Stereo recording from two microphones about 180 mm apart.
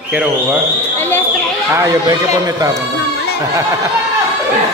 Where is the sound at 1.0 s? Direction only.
10° left (ahead or behind).